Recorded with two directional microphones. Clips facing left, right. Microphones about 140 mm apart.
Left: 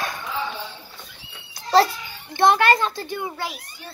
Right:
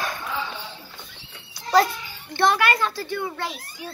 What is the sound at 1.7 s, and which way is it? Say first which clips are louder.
Speech: left 2 dB; 30° left (ahead or behind).